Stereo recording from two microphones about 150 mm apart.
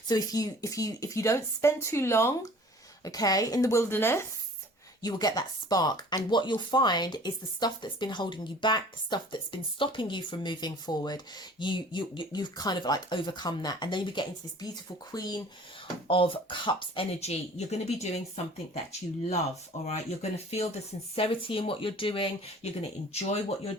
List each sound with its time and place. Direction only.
0.1 s speech: 25° left (ahead or behind); by 18.2 s 45° left (ahead or behind)
19.8 s speech: 50° left (ahead or behind)